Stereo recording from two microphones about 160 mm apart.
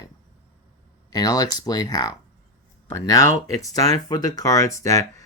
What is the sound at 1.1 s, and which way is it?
Speech, 25° left (ahead or behind).